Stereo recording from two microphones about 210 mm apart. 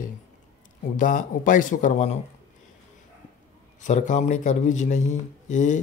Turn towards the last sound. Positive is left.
turn(degrees=35)  # may be behind; listen again after turning